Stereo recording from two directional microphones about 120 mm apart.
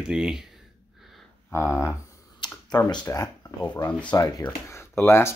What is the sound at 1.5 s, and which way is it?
Speech, 20° left (ahead or behind).